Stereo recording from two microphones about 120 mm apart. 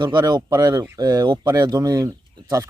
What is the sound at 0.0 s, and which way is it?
Speech, 35° right (ahead or behind).